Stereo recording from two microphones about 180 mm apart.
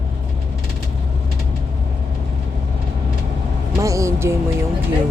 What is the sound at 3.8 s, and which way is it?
Music, 15° right (ahead or behind).